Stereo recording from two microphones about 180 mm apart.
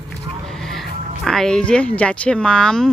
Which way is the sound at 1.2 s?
5° left (ahead or behind).